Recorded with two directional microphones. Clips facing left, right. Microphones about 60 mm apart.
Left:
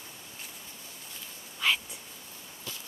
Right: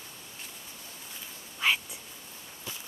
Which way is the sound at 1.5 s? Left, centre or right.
Centre.